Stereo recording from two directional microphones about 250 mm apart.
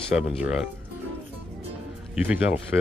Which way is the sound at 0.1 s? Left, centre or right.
Centre.